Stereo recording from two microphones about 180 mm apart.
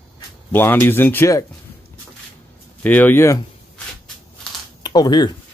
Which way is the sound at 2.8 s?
10° left (ahead or behind).